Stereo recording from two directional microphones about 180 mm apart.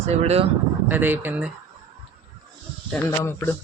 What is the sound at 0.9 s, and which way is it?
Speech, 10° right (ahead or behind).